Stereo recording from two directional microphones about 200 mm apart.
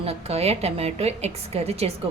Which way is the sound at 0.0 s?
30° right (ahead or behind).